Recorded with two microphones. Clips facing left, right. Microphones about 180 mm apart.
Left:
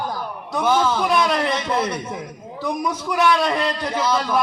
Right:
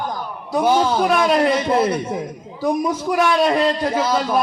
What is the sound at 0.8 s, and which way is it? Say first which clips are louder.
Speech: right 2 dB; 35° right (ahead or behind).